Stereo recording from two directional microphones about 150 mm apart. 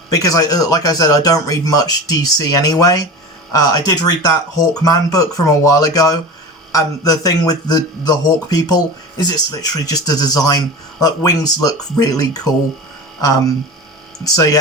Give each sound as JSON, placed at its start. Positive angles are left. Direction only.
{"t": 0.1, "sound": "speech", "side_deg": 25}
{"t": 14.3, "sound": "speech", "side_deg": 25}